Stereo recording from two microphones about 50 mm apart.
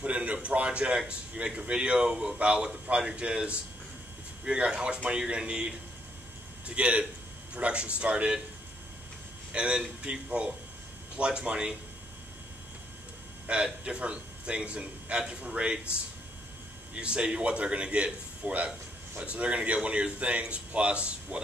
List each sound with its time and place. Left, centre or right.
0.0 s a man's voice: right
9.5 s speech: right
13.5 s a man's voice: centre
16.9 s speech: centre